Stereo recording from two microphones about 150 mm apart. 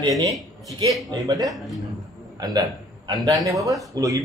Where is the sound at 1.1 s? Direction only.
25° right (ahead or behind).